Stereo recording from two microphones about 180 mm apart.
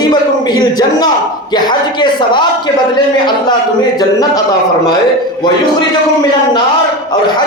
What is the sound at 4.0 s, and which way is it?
Speech, 20° left (ahead or behind).